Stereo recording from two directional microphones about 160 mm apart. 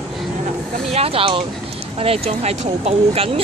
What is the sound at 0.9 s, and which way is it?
Speech, 35° right (ahead or behind).